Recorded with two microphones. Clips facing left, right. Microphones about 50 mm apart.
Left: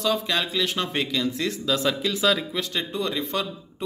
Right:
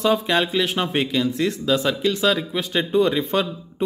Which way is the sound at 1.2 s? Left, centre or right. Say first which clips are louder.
Right 4 dB; centre.